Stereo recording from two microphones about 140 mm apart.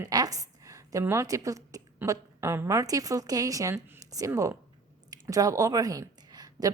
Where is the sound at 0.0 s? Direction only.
25° right (ahead or behind).